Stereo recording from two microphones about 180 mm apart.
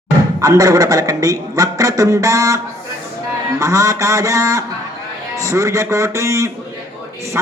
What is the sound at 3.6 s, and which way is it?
A man's voice, 15° right (ahead or behind).